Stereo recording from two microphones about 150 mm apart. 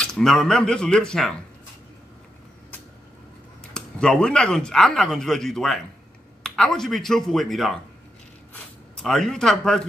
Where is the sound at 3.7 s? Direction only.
5° left (ahead or behind).